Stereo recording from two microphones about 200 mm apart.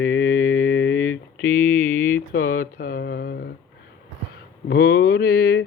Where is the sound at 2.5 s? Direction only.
45° left (ahead or behind).